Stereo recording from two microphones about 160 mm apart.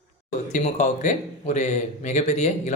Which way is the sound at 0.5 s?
50° left (ahead or behind).